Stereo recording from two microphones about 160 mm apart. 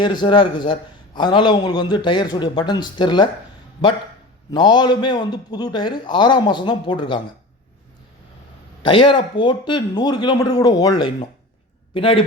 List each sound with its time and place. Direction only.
0.0 s a man's voice: 30° left (ahead or behind)
4.5 s a man's voice: 25° left (ahead or behind)
8.8 s a man's voice: 30° left (ahead or behind)